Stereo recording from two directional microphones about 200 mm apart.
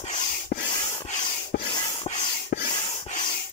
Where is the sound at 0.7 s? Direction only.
20° left (ahead or behind).